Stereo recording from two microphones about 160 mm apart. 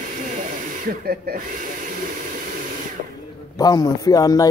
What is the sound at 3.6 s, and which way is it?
Speech, 25° left (ahead or behind).